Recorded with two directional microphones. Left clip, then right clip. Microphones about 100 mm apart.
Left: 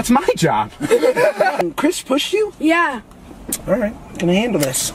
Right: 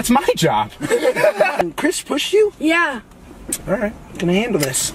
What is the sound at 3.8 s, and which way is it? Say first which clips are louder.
Speech: left 1 dB; 15° left (ahead or behind).